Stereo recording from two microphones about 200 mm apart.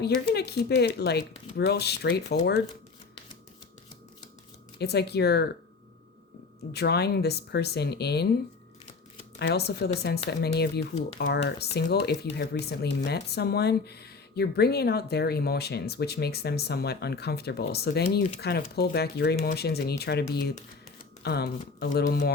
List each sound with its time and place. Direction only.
0.3 s speech: 55° left (ahead or behind)
4.8 s speech: 55° left (ahead or behind)
6.7 s speech: 55° left (ahead or behind)
9.4 s speech: 55° left (ahead or behind)
21.2 s speech: 55° left (ahead or behind)